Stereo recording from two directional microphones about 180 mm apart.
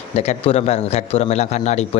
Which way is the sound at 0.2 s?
35° left (ahead or behind).